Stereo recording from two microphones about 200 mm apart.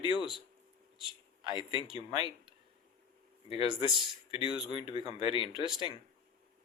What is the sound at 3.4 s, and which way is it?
Speech, 30° left (ahead or behind).